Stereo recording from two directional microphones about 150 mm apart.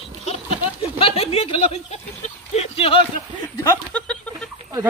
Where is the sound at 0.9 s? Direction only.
40° left (ahead or behind).